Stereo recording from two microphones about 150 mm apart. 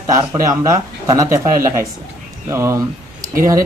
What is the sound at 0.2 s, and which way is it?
A man's voice, 20° right (ahead or behind).